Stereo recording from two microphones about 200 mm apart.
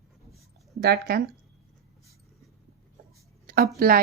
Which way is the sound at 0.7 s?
50° right (ahead or behind).